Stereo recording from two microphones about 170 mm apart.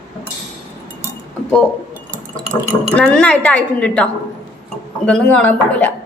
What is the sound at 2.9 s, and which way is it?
A woman's voice, 5° left (ahead or behind).